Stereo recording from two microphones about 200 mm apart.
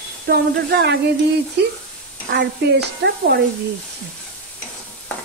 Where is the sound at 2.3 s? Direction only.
60° right (ahead or behind).